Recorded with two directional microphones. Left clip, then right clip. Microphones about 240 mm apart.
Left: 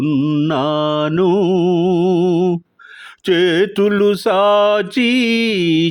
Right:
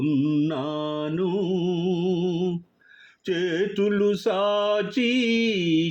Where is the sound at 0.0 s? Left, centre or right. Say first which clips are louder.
Left 6 dB; left.